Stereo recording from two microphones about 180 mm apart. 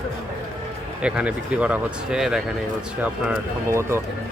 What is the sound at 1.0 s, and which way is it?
Speech, 5° right (ahead or behind).